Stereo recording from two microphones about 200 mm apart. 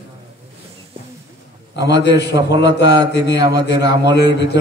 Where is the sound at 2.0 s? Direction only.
60° left (ahead or behind).